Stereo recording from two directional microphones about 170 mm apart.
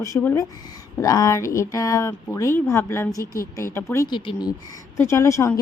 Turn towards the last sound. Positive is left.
turn(degrees=15)  # may be behind; listen again after turning